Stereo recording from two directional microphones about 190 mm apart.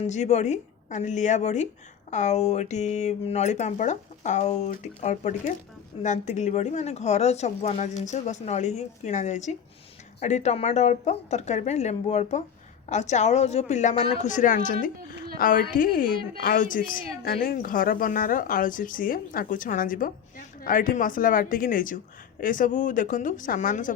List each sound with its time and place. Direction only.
0.0 s speech: 35° left (ahead or behind)